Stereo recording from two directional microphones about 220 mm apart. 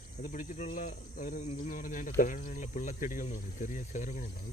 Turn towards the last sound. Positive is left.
turn(degrees=35)  # may be behind; listen again after turning